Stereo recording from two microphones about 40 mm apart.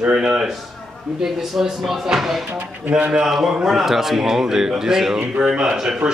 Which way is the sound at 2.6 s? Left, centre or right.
Right.